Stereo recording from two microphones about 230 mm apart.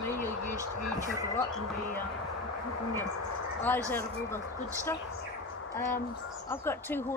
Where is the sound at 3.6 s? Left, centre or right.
Centre.